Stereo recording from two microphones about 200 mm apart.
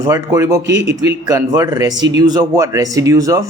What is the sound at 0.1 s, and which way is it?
Speech, 15° right (ahead or behind).